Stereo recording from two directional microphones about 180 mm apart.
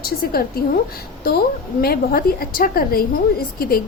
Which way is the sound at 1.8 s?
55° left (ahead or behind).